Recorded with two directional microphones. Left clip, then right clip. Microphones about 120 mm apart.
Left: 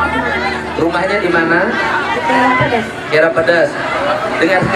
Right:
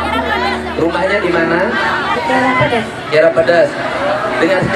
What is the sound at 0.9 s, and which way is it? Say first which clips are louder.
Speech: even; centre (ahead or behind).